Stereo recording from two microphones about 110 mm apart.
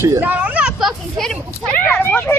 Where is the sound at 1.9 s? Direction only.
15° left (ahead or behind).